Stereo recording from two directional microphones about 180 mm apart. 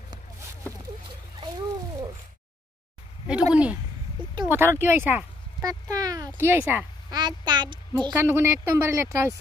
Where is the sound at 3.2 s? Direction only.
5° right (ahead or behind).